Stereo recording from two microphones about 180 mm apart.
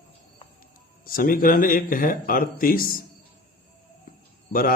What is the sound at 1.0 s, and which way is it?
A man's voice, 50° left (ahead or behind).